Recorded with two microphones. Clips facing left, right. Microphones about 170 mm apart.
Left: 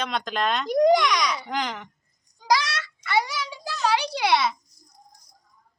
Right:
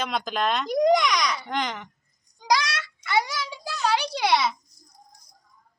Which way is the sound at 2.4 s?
5° left (ahead or behind).